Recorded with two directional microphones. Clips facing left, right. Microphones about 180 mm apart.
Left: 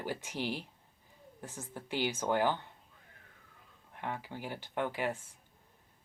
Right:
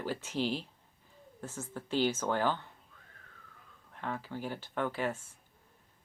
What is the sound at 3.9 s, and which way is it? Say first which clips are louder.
Speech: right 2 dB; 15° left (ahead or behind).